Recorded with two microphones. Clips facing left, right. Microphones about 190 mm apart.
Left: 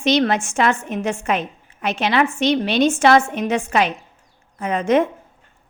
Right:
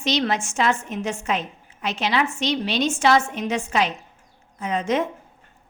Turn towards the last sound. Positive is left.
turn(degrees=55)  # may be behind; listen again after turning